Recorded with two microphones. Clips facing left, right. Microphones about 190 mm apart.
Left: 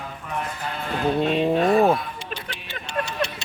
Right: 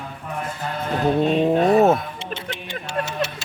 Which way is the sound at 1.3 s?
45° right (ahead or behind).